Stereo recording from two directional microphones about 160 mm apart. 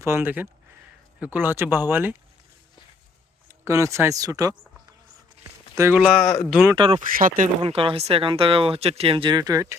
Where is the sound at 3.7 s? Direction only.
20° right (ahead or behind).